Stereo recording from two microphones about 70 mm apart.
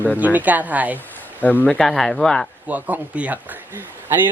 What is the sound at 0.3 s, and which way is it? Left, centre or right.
Speech, right.